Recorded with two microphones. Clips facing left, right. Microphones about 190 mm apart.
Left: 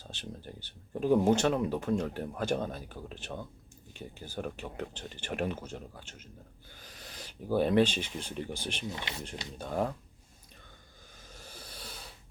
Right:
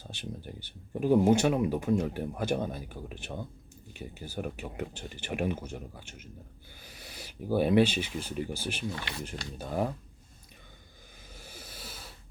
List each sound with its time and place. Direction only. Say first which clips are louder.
0.0 s speech: right 3 dB; 10° right (ahead or behind)
8.9 s speech: right 2 dB; 20° left (ahead or behind)
9.6 s speech: right 1 dB; 5° right (ahead or behind)
11.3 s a sound: right 1 dB; 10° right (ahead or behind)